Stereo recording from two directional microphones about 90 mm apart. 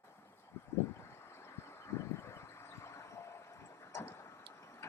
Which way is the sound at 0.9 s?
30° left (ahead or behind).